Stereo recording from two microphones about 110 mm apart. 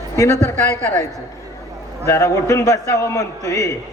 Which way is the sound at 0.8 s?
10° left (ahead or behind).